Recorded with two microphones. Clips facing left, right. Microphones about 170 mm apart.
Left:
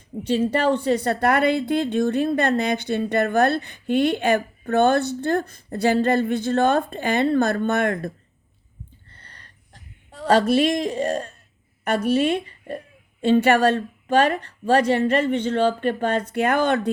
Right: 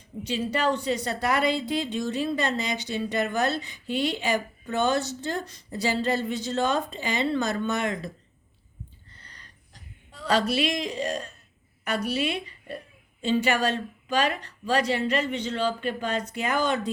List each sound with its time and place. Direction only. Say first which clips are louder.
0.2 s a woman's voice: left 6 dB; 55° left (ahead or behind)
9.0 s a sound: left 2 dB; 55° left (ahead or behind)
10.1 s a woman's voice: left 7 dB; 50° left (ahead or behind)